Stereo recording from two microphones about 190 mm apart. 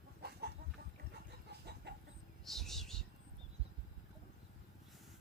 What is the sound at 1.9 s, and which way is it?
Chicken, 60° right (ahead or behind).